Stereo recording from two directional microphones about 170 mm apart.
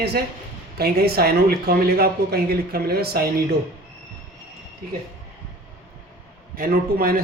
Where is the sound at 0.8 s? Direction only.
65° right (ahead or behind).